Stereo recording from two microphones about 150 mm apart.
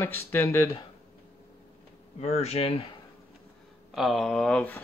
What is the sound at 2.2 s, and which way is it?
Speech, 45° left (ahead or behind).